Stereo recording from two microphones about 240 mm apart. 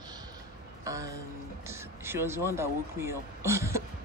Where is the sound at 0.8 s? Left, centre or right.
Centre.